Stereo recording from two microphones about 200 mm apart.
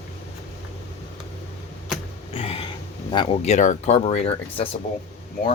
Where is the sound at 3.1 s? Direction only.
30° left (ahead or behind).